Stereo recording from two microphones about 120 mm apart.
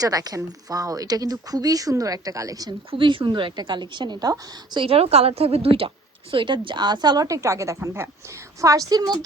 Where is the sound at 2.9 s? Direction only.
45° right (ahead or behind).